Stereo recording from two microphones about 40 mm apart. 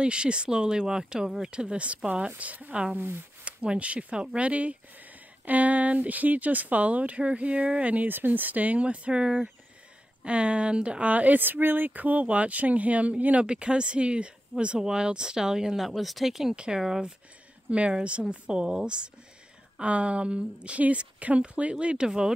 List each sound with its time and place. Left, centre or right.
0.0 s speech: right
2.3 s speech: right
2.7 s speech: right
3.0 s speech: right
3.4 s speech: right
7.9 s speech: right
11.1 s speech: right
13.5 s speech: right; by 16.5 s centre
16.5 s speech: right